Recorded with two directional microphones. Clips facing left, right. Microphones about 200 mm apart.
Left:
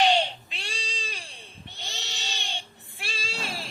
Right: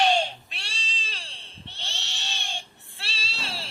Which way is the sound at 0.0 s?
15° left (ahead or behind).